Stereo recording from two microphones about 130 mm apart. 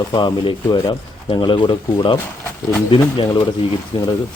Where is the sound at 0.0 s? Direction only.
30° left (ahead or behind).